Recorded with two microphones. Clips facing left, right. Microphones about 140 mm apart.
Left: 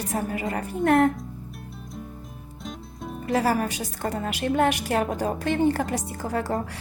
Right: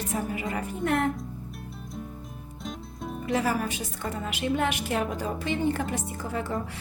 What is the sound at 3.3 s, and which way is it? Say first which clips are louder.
A woman's voice: left 4 dB; 45° left (ahead or behind).